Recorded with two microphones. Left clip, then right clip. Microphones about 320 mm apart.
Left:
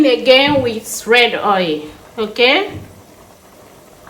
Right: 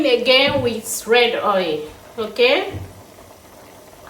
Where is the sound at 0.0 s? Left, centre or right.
Left.